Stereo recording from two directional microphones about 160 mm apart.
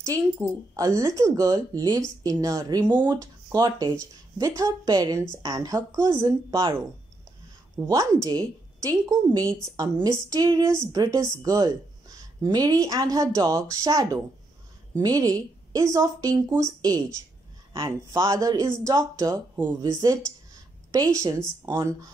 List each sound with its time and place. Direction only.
0.0 s speech: 20° right (ahead or behind)
7.8 s speech: 20° right (ahead or behind)